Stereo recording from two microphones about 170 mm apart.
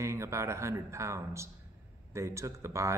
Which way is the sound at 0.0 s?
15° right (ahead or behind).